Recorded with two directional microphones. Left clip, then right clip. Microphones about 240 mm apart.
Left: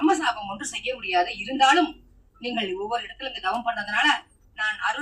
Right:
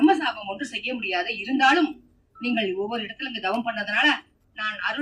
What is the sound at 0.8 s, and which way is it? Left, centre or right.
Speech, right.